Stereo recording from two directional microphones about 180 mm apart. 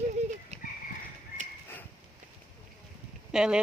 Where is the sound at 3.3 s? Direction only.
5° right (ahead or behind).